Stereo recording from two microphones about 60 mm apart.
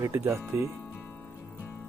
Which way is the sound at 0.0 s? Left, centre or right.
Right.